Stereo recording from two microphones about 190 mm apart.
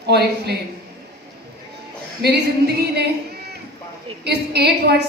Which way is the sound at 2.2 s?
60° right (ahead or behind).